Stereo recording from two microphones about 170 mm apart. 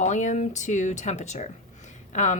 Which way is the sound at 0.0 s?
45° left (ahead or behind).